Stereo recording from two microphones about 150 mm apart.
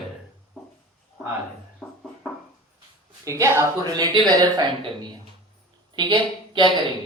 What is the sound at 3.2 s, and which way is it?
A woman's voice, 20° right (ahead or behind).